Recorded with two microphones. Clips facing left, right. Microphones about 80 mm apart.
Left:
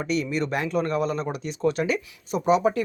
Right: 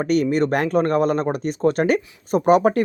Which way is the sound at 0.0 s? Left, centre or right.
Right.